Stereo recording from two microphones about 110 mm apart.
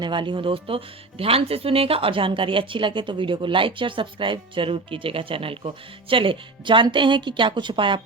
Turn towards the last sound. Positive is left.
turn(degrees=-45)  # may be behind; listen again after turning